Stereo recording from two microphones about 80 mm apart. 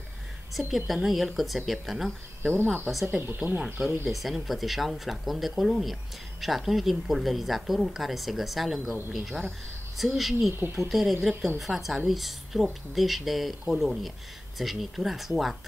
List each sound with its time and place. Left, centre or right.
0.6 s speech: centre
2.5 s speech: right
2.9 s a woman's voice: centre